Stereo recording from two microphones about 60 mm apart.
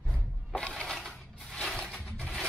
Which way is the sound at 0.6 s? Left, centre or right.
Centre.